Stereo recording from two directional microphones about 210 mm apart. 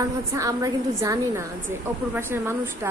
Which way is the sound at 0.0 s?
15° right (ahead or behind).